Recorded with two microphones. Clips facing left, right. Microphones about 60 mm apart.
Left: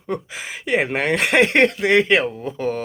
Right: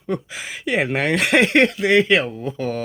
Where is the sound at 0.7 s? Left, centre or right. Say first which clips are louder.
Even; left.